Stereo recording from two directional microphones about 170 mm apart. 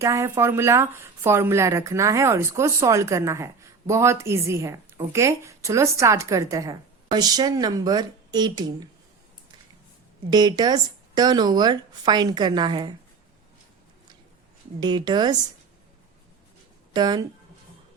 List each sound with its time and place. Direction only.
0.0 s speech: 15° right (ahead or behind)
10.2 s speech: 25° right (ahead or behind)
14.8 s speech: 25° right (ahead or behind)
16.9 s speech: 25° right (ahead or behind)